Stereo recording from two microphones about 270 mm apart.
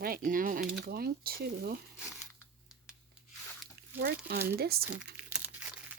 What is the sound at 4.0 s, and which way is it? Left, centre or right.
Speech, right.